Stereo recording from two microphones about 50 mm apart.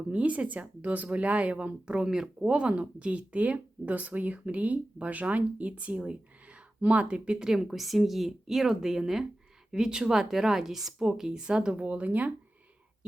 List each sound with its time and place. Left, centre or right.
0.0 s speech: right; by 2.5 s centre
2.5 s a woman's voice: right
11.8 s speech: right